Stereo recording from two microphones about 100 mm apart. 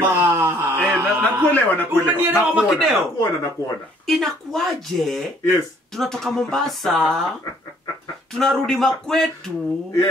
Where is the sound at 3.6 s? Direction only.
35° left (ahead or behind).